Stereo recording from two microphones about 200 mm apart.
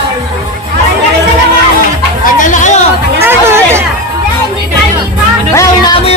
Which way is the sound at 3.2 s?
10° right (ahead or behind).